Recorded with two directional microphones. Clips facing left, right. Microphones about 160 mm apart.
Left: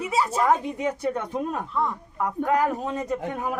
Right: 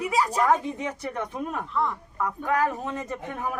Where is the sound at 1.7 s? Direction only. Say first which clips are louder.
Left 1 dB; 10° left (ahead or behind).